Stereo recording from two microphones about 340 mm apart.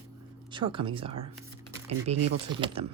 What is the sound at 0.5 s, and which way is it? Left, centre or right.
Speech, centre.